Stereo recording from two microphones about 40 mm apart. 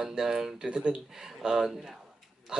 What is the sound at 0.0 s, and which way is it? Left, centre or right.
Speech, centre.